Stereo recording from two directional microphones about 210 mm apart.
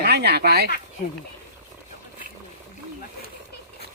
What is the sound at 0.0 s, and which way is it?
Speech, 50° right (ahead or behind).